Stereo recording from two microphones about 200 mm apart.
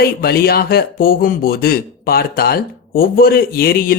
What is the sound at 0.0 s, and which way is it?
Speech, 50° left (ahead or behind).